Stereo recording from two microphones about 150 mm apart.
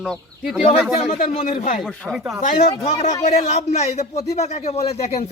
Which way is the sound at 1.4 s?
60° left (ahead or behind).